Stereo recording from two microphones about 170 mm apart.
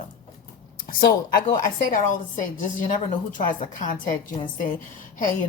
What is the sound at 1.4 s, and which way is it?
Speech, 50° left (ahead or behind).